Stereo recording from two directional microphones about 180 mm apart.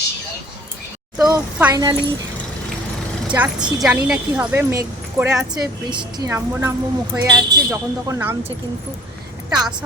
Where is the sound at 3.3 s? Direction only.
5° right (ahead or behind).